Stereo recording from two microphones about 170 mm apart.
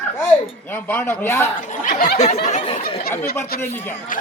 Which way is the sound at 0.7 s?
10° left (ahead or behind).